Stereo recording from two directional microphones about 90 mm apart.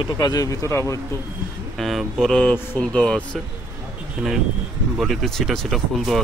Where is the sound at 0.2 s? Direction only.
45° left (ahead or behind).